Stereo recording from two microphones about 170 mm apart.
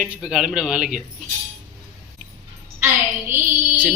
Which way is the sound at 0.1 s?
5° right (ahead or behind).